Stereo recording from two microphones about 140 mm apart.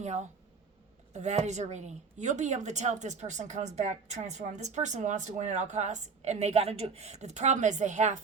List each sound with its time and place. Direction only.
0.0 s speech: 55° right (ahead or behind)